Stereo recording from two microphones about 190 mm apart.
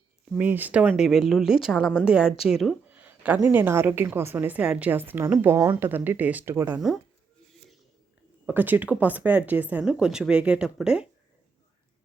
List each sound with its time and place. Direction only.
0.3 s speech: 5° right (ahead or behind)
6.7 s speech: centre (ahead or behind)
8.4 s speech: 10° right (ahead or behind)